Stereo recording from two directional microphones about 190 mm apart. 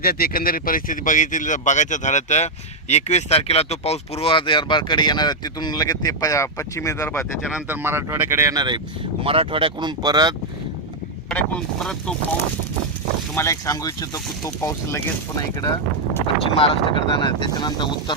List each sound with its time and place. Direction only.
0.0 s speech: 50° left (ahead or behind); by 7.3 s 15° left (ahead or behind)
7.5 s speech: 10° right (ahead or behind)
11.3 s speech: 5° left (ahead or behind)
13.3 s speech: 15° left (ahead or behind)
16.6 s speech: 25° left (ahead or behind)